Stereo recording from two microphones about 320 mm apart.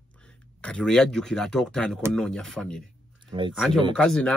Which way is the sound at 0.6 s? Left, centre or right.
Centre.